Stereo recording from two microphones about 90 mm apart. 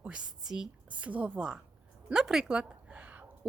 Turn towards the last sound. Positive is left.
turn(degrees=-15)  # may be behind; listen again after turning